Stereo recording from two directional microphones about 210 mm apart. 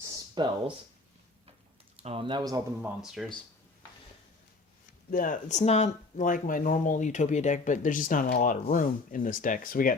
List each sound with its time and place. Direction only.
0.0 s a sound: 20° right (ahead or behind)
2.0 s speech: 25° right (ahead or behind)
3.0 s speech: centre (ahead or behind)
5.1 s speech: 40° left (ahead or behind)